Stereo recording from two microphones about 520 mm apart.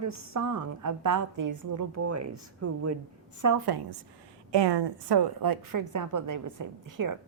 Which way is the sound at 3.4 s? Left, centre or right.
Right.